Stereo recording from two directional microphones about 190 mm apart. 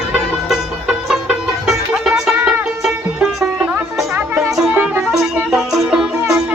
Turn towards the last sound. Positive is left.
turn(degrees=-5)  # may be behind; listen again after turning